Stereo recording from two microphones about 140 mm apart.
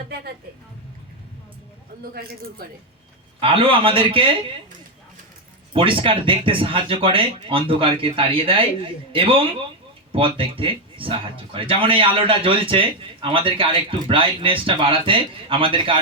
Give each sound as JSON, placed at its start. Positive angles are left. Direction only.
{"t": 2.1, "sound": "speech", "side_deg": -90}
{"t": 3.4, "sound": "a man's voice", "side_deg": -40}
{"t": 5.7, "sound": "a man's voice", "side_deg": -40}